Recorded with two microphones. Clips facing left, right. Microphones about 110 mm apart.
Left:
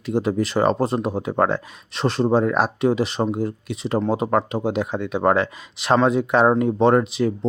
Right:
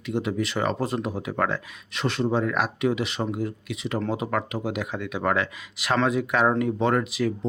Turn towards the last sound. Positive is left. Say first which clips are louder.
# left 6 dB
turn(degrees=30)  # may be behind; listen again after turning